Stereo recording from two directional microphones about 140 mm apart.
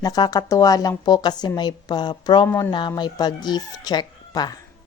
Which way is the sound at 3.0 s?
30° left (ahead or behind).